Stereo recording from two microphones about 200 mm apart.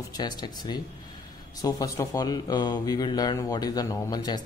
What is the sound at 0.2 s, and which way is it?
Speech, 20° left (ahead or behind).